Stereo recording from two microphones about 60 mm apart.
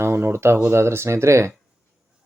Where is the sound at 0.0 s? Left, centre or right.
Right.